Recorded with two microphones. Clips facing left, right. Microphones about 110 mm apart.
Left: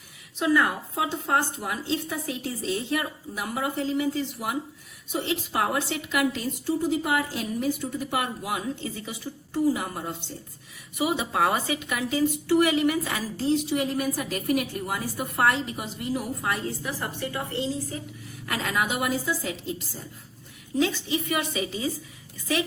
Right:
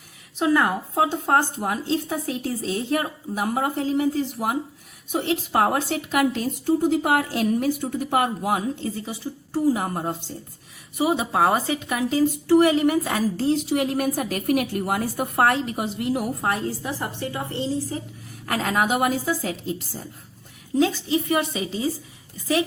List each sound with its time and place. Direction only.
0.3 s a woman's voice: 35° right (ahead or behind)
0.9 s a woman's voice: 45° right (ahead or behind)
13.7 s a woman's voice: 55° right (ahead or behind)
16.4 s a woman's voice: 40° right (ahead or behind)
16.8 s a woman's voice: 25° right (ahead or behind)
18.4 s a woman's voice: 40° right (ahead or behind)
20.7 s a woman's voice: 35° right (ahead or behind)